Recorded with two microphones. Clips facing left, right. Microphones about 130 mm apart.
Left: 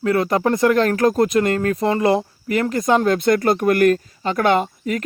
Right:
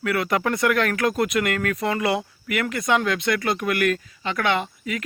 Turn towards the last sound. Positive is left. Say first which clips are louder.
# left 6 dB
turn(degrees=40)  # may be behind; listen again after turning